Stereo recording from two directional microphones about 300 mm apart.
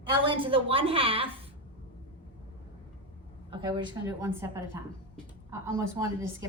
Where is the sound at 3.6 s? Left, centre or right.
Centre.